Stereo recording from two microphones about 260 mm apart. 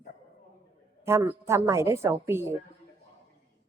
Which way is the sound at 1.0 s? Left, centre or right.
Centre.